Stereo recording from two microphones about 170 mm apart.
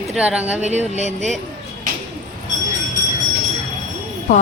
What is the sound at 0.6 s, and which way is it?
Speech, 40° right (ahead or behind).